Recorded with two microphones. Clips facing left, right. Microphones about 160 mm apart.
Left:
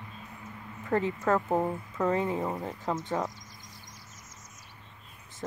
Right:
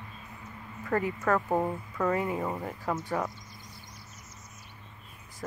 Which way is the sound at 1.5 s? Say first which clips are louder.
Even; centre (ahead or behind).